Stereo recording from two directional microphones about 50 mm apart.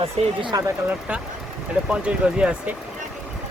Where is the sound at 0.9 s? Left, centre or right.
Right.